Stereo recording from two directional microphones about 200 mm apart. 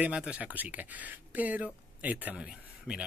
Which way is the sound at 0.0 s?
5° right (ahead or behind).